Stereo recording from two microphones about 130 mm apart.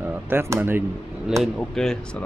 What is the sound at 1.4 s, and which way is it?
Speech, 5° left (ahead or behind).